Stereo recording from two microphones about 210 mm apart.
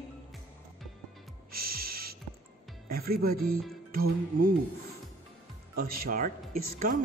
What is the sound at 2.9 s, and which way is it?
Speech, 45° right (ahead or behind).